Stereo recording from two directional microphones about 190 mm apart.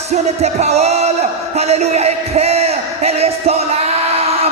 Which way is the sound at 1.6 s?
35° right (ahead or behind).